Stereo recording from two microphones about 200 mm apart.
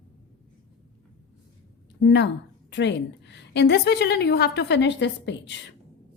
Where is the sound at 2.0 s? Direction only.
60° left (ahead or behind).